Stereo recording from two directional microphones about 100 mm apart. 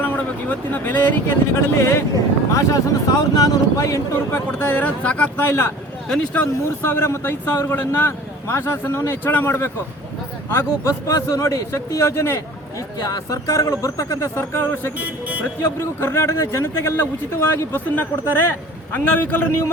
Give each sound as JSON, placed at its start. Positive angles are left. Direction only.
{"t": 0.0, "sound": "speech", "side_deg": 15}
{"t": 6.7, "sound": "speech", "side_deg": 25}
{"t": 15.0, "sound": "speech", "side_deg": -15}
{"t": 15.6, "sound": "speech", "side_deg": 25}